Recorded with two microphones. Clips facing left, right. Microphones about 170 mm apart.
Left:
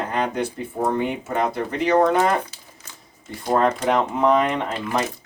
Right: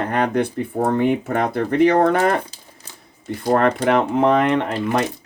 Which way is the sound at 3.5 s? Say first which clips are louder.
Right 2 dB; 65° right (ahead or behind).